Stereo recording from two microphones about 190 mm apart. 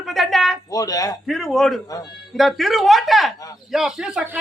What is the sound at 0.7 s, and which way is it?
Speech, 20° left (ahead or behind).